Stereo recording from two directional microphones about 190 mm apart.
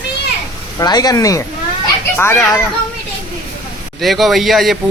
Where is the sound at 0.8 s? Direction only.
20° left (ahead or behind).